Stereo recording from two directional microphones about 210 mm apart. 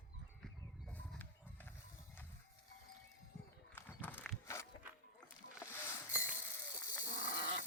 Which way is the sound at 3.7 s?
10° left (ahead or behind).